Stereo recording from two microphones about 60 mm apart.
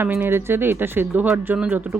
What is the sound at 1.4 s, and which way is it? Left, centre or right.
Speech, right.